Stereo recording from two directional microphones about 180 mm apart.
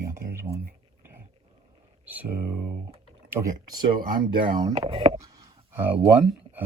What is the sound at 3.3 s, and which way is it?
Speech, 25° right (ahead or behind).